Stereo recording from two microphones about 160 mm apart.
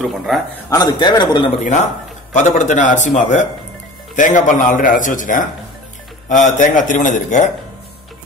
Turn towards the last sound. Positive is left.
turn(degrees=50)  # may be behind; listen again after turning